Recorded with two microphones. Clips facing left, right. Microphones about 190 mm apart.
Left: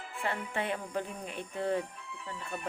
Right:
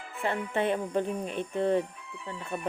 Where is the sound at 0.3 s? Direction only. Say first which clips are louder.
Right 6 dB; 25° right (ahead or behind).